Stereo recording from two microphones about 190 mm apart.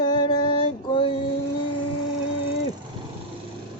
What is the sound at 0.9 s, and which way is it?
Female singing, 25° left (ahead or behind).